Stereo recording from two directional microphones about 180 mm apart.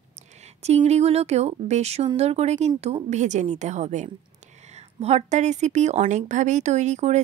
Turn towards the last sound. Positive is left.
turn(degrees=-40)  # may be behind; listen again after turning